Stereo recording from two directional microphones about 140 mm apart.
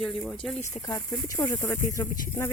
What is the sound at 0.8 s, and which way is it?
Speech, 30° left (ahead or behind).